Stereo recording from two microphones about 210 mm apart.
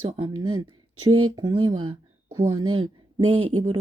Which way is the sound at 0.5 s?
90° right.